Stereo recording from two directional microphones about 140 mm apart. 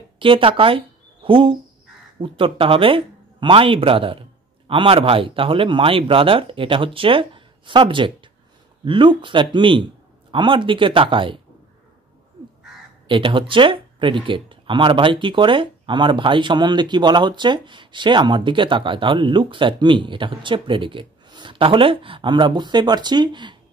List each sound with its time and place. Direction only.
0.2 s speech: 40° right (ahead or behind)
13.1 s speech: 35° right (ahead or behind)